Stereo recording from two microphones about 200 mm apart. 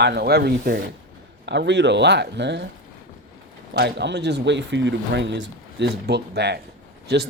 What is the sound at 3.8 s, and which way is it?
Speech, 55° right (ahead or behind).